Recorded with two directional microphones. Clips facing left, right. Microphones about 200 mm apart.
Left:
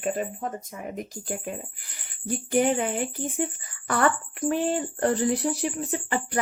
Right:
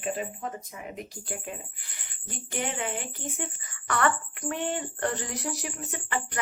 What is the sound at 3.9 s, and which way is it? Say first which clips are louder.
A woman's voice: left 3 dB; 35° left (ahead or behind).